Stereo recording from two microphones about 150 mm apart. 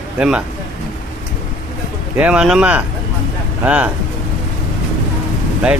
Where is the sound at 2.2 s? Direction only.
5° right (ahead or behind).